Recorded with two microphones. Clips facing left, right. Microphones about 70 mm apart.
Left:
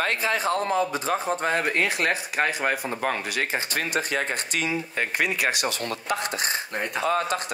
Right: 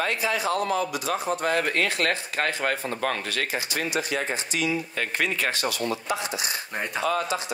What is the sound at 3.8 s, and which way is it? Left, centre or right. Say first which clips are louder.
Speech: left 1 dB; left.